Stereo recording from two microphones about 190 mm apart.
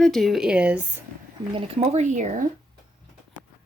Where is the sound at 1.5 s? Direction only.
35° right (ahead or behind).